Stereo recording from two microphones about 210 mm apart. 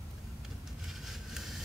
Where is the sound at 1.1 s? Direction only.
Centre (ahead or behind).